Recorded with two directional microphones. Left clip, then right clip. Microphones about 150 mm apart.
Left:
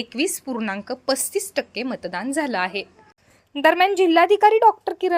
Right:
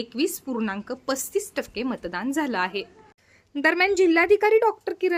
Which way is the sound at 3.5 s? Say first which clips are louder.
Left 4 dB; 20° left (ahead or behind).